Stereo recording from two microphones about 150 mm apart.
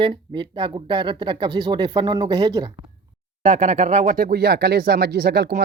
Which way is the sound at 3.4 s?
50° right (ahead or behind).